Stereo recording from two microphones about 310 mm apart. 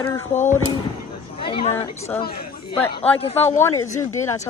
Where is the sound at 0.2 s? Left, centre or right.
Centre.